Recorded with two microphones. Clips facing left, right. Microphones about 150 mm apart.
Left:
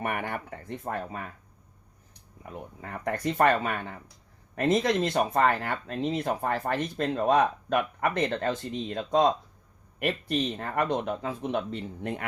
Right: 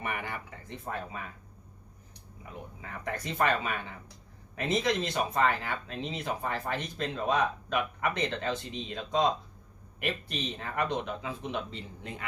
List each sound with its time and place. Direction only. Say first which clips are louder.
0.0 s speech: left 5 dB; 55° left (ahead or behind)
2.5 s speech: left 4 dB; 50° left (ahead or behind)